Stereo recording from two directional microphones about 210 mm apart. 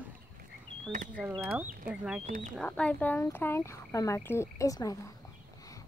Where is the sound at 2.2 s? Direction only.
40° right (ahead or behind).